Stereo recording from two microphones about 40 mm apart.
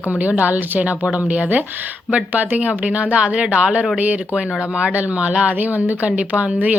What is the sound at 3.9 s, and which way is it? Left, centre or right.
Speech, right.